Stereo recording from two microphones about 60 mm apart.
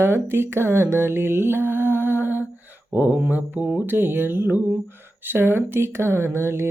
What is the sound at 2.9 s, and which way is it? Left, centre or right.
Speech, right.